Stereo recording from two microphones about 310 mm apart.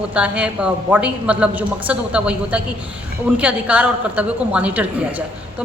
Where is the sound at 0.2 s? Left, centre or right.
Centre.